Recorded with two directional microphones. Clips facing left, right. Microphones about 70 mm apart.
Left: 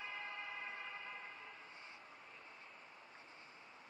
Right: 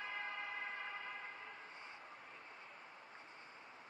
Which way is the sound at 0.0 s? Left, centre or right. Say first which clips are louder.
Right 2 dB; right.